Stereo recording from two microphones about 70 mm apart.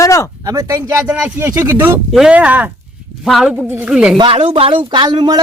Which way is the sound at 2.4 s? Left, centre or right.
Right.